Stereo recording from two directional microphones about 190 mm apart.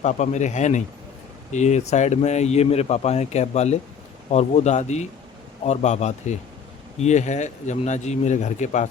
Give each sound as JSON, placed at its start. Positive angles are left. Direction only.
{"t": 0.0, "sound": "speech", "side_deg": 40}